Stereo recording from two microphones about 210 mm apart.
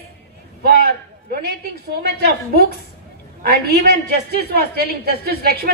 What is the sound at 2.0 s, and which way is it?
Speech, 45° right (ahead or behind).